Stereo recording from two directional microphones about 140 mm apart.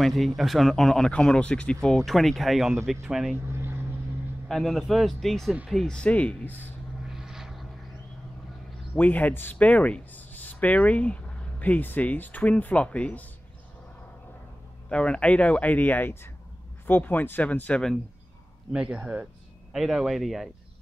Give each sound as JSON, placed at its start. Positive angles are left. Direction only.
{"t": 0.0, "sound": "speech", "side_deg": 0}
{"t": 3.5, "sound": "vehicle", "side_deg": -15}
{"t": 4.5, "sound": "speech", "side_deg": 0}
{"t": 7.1, "sound": "vehicle", "side_deg": -5}
{"t": 8.9, "sound": "speech", "side_deg": 10}
{"t": 14.9, "sound": "speech", "side_deg": 5}
{"t": 18.7, "sound": "speech", "side_deg": -5}